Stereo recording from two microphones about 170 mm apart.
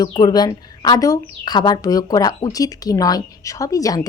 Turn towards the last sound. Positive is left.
turn(degrees=20)  # may be behind; listen again after turning